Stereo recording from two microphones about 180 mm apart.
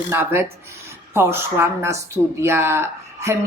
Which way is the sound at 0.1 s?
10° right (ahead or behind).